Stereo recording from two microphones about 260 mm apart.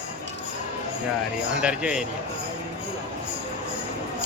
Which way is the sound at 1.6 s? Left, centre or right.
Centre.